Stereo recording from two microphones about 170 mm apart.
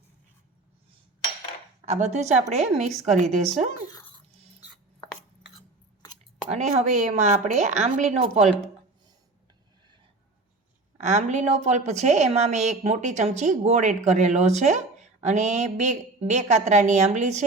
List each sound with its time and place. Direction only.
1.8 s a woman's voice: 40° right (ahead or behind)
6.5 s a woman's voice: 40° right (ahead or behind)
11.0 s a woman's voice: 45° right (ahead or behind)